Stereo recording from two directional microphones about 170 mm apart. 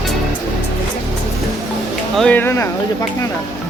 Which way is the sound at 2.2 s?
10° left (ahead or behind).